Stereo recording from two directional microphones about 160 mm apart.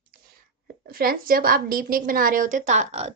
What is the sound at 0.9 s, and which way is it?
A woman's voice, 65° right (ahead or behind).